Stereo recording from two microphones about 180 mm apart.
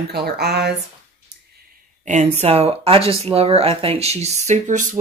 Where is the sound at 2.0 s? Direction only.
40° right (ahead or behind).